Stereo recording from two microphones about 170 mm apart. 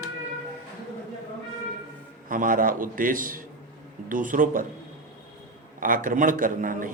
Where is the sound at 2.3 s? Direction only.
55° right (ahead or behind).